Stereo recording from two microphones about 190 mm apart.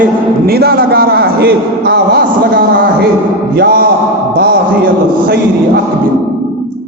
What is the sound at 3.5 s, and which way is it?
Speech, 55° right (ahead or behind).